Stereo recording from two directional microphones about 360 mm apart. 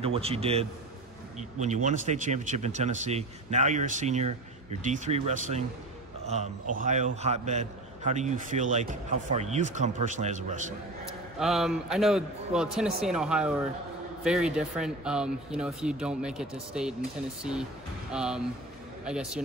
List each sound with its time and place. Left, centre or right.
0.0 s a man's voice: centre
11.3 s speech: centre